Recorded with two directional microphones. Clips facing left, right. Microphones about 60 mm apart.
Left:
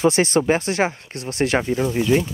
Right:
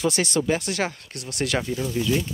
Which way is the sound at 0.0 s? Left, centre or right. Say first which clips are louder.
Left 6 dB; left.